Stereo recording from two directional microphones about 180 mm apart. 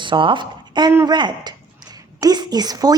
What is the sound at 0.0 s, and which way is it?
Speech, 25° right (ahead or behind).